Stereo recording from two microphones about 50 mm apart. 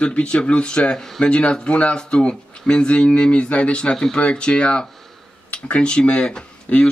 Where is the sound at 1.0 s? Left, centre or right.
Centre.